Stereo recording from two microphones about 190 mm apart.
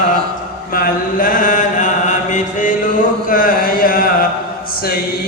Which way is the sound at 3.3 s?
45° left (ahead or behind).